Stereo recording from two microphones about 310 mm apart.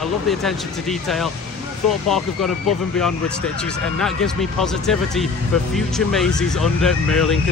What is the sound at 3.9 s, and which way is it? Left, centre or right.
Speech, centre.